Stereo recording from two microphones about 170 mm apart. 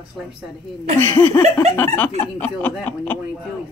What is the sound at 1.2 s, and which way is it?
A woman's voice, 10° left (ahead or behind).